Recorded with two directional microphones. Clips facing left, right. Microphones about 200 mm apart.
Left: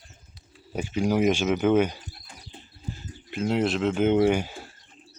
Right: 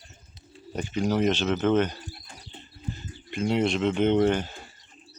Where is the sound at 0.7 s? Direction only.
10° left (ahead or behind).